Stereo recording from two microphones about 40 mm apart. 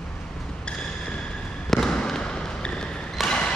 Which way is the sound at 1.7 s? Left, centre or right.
Centre.